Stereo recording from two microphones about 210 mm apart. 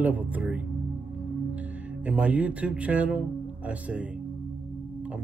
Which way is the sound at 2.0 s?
5° right (ahead or behind).